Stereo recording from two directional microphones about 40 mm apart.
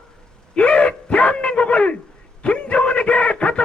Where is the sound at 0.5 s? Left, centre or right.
Left.